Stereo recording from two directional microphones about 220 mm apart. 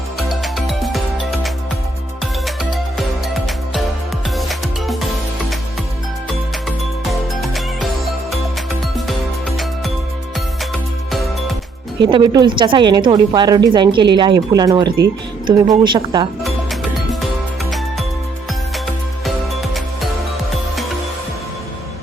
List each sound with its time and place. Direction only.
0.2 s music: centre (ahead or behind)
3.2 s music: centre (ahead or behind)
6.7 s music: centre (ahead or behind)
11.1 s music: centre (ahead or behind)
12.1 s speech: 20° right (ahead or behind)